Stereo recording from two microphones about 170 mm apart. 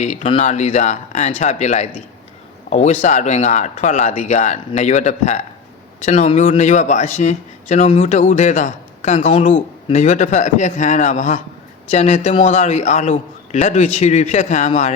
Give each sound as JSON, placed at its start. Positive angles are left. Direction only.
{"t": 0.0, "sound": "a man's voice", "side_deg": 40}